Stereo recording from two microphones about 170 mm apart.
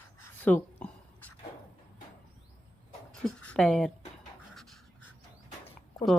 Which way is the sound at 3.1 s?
5° left (ahead or behind).